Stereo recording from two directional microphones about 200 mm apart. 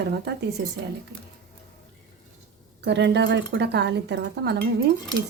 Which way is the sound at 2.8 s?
60° right (ahead or behind).